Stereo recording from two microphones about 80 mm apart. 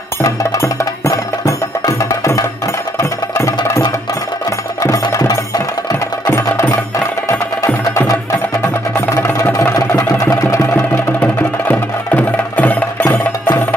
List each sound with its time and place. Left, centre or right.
0.2 s music: left
6.2 s music: left
9.1 s music: left
10.3 s engine: left
11.1 s music: left